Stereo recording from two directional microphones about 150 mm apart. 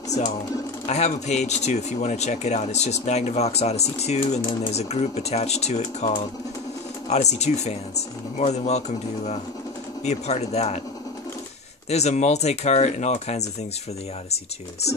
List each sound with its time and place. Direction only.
0.8 s speech: 50° left (ahead or behind)
11.9 s speech: 50° left (ahead or behind)